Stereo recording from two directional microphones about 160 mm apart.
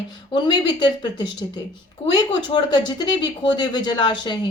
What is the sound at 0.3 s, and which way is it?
Speech, 30° left (ahead or behind).